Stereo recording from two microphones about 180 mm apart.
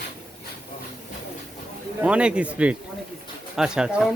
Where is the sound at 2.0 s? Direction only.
5° right (ahead or behind).